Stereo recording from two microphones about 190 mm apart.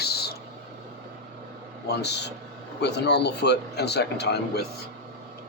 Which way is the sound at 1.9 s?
60° left (ahead or behind).